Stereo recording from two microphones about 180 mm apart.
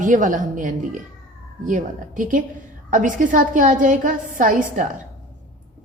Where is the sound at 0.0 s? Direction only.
45° right (ahead or behind).